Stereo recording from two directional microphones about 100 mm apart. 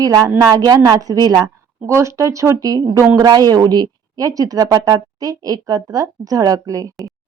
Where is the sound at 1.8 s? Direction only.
30° right (ahead or behind).